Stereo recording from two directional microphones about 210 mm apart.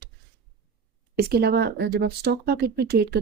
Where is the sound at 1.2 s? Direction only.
50° right (ahead or behind).